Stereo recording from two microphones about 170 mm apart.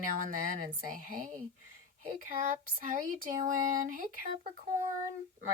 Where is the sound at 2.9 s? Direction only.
50° right (ahead or behind).